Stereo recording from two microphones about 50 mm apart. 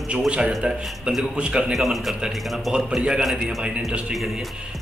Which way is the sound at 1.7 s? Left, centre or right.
Centre.